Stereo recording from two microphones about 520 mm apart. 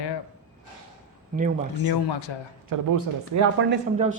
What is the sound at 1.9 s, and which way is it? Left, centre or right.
Speech, left.